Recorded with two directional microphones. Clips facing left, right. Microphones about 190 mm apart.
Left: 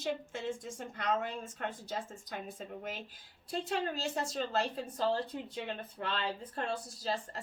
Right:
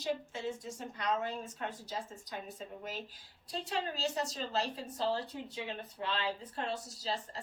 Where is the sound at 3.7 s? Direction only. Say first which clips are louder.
Even; 55° left (ahead or behind).